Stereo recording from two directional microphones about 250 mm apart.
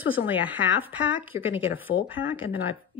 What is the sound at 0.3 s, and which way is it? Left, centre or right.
Speech, centre.